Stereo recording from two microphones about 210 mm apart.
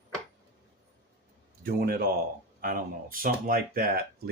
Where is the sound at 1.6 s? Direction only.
45° right (ahead or behind).